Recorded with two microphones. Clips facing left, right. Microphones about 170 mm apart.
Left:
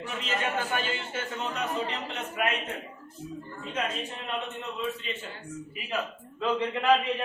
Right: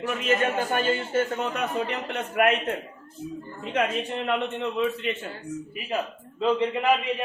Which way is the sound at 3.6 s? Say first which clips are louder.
Right 7 dB; 65° right (ahead or behind).